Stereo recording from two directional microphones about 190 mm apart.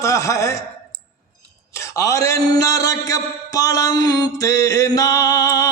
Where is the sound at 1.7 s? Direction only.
15° left (ahead or behind).